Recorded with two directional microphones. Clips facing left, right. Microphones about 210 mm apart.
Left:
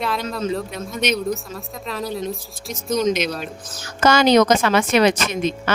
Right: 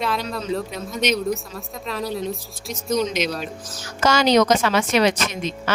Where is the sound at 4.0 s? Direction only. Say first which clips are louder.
Left 2 dB; 55° left (ahead or behind).